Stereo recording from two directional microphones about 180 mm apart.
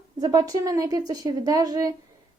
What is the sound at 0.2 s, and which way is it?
A woman's voice, 20° right (ahead or behind).